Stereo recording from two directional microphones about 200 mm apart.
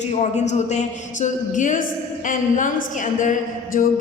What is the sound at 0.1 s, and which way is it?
A man's voice, 35° left (ahead or behind).